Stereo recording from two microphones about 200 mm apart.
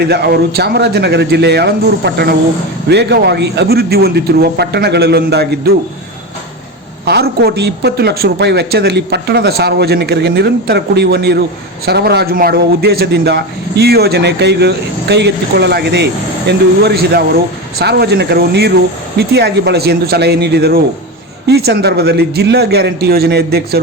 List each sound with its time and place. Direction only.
0.0 s a man's voice: 55° right (ahead or behind)
7.0 s a man's voice: 55° right (ahead or behind)